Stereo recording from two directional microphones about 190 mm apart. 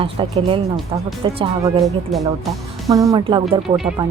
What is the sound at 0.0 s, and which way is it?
Speech, 30° right (ahead or behind).